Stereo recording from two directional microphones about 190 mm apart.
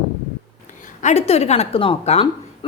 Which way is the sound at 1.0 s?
35° left (ahead or behind).